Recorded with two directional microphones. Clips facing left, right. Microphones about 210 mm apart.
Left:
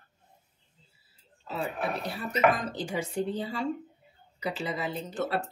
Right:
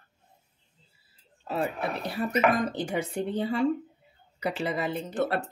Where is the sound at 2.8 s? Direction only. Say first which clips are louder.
Right 1 dB; 60° right (ahead or behind).